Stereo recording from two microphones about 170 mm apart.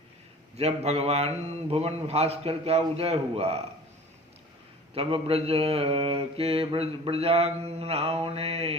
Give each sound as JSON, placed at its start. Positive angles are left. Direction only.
{"t": 0.5, "sound": "mantra", "side_deg": -40}
{"t": 4.9, "sound": "mantra", "side_deg": -35}